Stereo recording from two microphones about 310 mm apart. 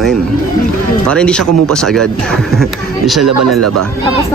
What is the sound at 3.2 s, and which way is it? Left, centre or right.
Speech, right.